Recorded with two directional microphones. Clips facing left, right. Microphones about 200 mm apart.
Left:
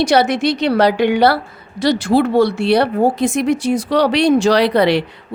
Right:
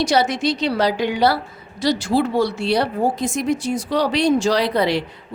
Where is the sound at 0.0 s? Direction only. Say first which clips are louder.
Left 4 dB; 60° left (ahead or behind).